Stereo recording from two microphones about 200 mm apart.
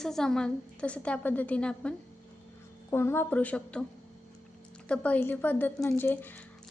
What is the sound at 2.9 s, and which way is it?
Speech, 10° left (ahead or behind).